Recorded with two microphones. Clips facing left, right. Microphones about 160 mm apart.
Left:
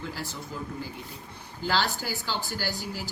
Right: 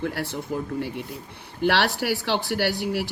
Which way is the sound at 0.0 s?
60° right (ahead or behind).